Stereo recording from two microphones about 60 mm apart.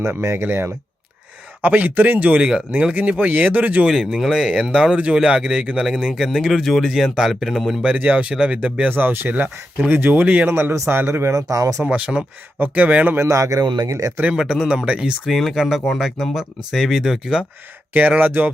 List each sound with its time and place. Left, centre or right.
0.0 s speech: right
1.6 s speech: right
3.8 s speech: centre
7.9 s speech: right
8.9 s speech: right
10.5 s speech: right
11.3 s speech: right
11.9 s speech: centre
12.5 s speech: right
13.2 s a man's voice: right
14.3 s speech: centre
15.3 s speech: centre
18.2 s speech: right